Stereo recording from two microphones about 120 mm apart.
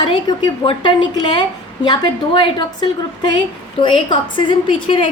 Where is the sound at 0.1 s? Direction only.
40° left (ahead or behind).